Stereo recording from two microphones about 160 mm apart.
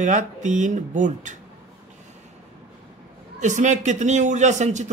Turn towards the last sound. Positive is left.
turn(degrees=-50)  # may be behind; listen again after turning